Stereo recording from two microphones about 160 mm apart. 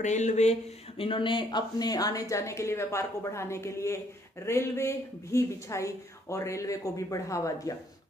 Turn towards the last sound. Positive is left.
turn(degrees=20)  # may be behind; listen again after turning